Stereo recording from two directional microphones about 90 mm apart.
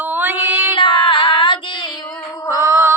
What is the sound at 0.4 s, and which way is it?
Female singing, 25° right (ahead or behind).